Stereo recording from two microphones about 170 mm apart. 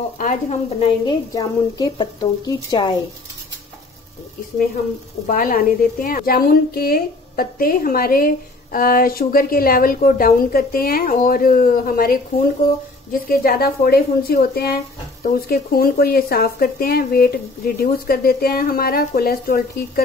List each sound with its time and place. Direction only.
0.2 s speech: 40° left (ahead or behind)
1.0 s speech: 20° left (ahead or behind)
5.2 s speech: 55° left (ahead or behind)